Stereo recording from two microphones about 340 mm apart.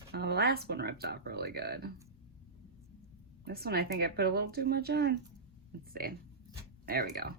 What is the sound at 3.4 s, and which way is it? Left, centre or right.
Speech, right.